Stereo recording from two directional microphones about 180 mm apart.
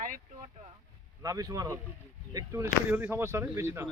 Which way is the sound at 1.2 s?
20° right (ahead or behind).